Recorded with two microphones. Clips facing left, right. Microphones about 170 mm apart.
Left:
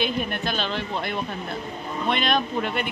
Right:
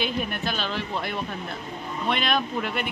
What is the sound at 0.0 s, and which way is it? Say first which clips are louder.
Speech: left 2 dB; centre (ahead or behind).